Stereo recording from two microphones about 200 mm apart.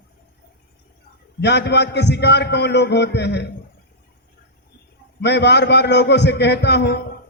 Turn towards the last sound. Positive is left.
turn(degrees=60)  # may be behind; listen again after turning